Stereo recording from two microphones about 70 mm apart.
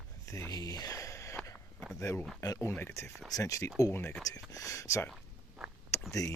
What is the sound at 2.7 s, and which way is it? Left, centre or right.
Speech, left.